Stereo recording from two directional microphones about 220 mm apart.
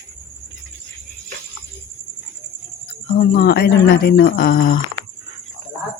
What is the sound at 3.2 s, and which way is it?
Speech, 45° left (ahead or behind).